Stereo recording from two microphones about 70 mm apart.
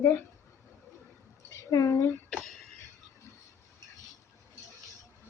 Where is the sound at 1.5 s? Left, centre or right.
Left.